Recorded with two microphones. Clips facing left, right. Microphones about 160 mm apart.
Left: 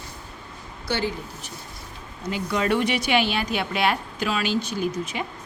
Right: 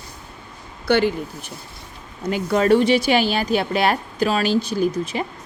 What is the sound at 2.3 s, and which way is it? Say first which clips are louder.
Speech: right 7 dB; 45° right (ahead or behind).